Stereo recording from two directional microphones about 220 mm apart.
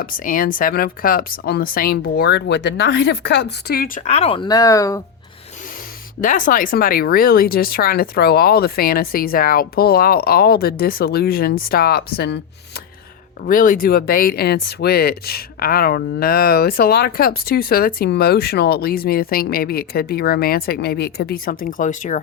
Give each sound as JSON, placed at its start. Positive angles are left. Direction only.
{"t": 0.0, "sound": "speech", "side_deg": 40}
{"t": 6.2, "sound": "speech", "side_deg": 35}
{"t": 13.4, "sound": "speech", "side_deg": 40}